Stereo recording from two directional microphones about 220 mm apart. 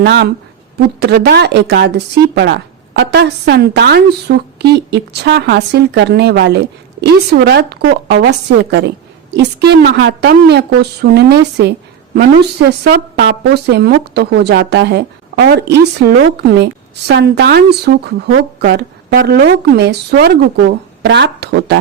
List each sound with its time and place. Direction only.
0.0 s a woman's voice: 50° right (ahead or behind)